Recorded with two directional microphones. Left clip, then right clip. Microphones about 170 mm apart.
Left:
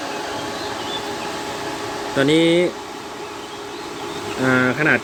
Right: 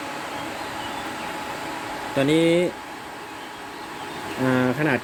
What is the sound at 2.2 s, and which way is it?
Speech, 25° right (ahead or behind).